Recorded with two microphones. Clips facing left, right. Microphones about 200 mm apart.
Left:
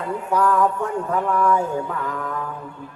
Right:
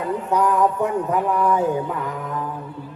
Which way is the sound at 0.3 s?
20° right (ahead or behind).